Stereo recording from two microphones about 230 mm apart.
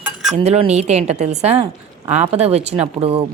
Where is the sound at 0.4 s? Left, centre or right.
Right.